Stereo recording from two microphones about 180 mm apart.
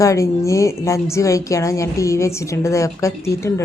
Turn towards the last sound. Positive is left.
turn(degrees=15)  # may be behind; listen again after turning